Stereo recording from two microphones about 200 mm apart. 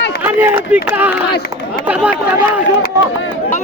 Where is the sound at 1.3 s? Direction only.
55° left (ahead or behind).